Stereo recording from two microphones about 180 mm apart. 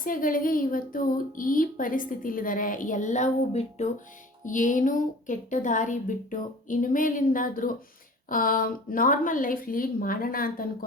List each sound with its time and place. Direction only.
0.0 s a woman's voice: 50° left (ahead or behind)